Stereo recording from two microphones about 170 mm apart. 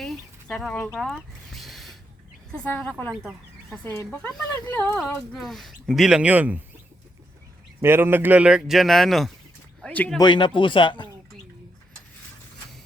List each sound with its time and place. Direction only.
0.0 s a sound: centre (ahead or behind)
2.5 s speech: 5° left (ahead or behind); by 6.6 s 10° right (ahead or behind)
7.8 s speech: 15° right (ahead or behind); by 10.2 s 5° left (ahead or behind)
10.2 s speech: 25° left (ahead or behind)